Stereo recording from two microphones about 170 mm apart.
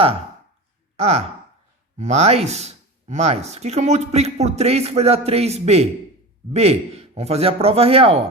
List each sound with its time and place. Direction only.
0.9 s speech: 40° right (ahead or behind)